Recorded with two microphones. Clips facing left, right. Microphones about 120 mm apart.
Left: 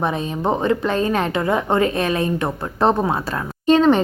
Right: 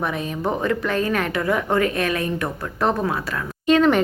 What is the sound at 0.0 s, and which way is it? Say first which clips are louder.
A woman's voice: left 3 dB; 25° left (ahead or behind).